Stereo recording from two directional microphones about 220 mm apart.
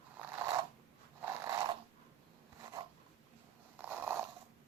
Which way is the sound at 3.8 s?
10° right (ahead or behind).